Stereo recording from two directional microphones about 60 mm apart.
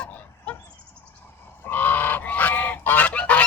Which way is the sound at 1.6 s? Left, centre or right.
Left.